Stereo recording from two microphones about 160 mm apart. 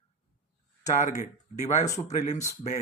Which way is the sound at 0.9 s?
50° left (ahead or behind).